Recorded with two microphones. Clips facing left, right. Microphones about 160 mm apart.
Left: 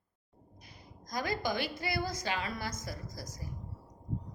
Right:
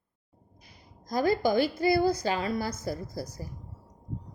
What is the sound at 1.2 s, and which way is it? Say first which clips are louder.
A woman's voice: right 10 dB; 40° right (ahead or behind).